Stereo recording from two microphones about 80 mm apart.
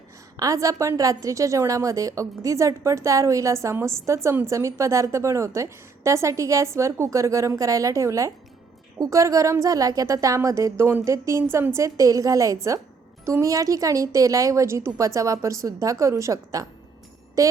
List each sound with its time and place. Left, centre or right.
0.3 s a woman's voice: right